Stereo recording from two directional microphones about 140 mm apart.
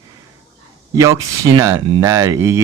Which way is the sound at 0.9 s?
20° right (ahead or behind).